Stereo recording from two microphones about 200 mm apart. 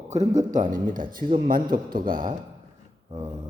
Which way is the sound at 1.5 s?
45° right (ahead or behind).